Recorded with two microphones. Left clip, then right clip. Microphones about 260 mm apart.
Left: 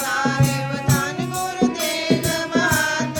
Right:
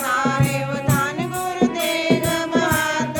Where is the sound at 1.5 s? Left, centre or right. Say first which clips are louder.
Right 2 dB; right.